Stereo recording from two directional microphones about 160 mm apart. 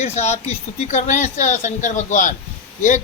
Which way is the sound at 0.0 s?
45° left (ahead or behind).